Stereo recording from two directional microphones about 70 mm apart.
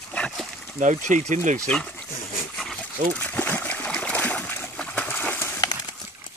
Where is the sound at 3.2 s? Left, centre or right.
Left.